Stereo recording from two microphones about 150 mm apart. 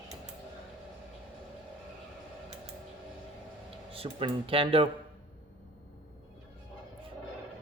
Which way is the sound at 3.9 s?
40° right (ahead or behind).